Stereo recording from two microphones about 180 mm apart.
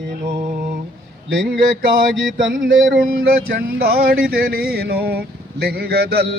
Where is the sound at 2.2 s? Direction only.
90° right.